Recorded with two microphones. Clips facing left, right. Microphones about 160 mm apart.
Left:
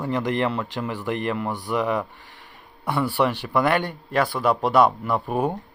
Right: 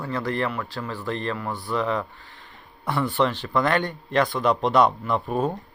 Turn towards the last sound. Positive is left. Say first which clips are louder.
# left 1 dB
turn(degrees=10)  # may be behind; listen again after turning